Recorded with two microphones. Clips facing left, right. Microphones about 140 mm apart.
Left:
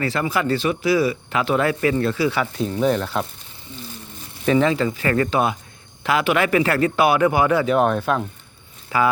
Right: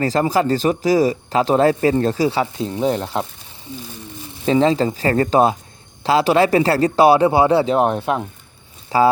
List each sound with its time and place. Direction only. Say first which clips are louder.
0.0 s speech: right 5 dB; 40° right (ahead or behind)
4.4 s speech: right 2 dB; 25° right (ahead or behind)
8.9 s speech: right 5 dB; 35° right (ahead or behind)